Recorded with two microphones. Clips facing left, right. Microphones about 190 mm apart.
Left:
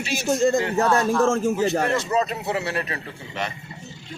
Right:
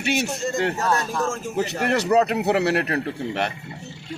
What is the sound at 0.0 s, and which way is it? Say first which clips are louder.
Speech: right 5 dB; 60° right (ahead or behind).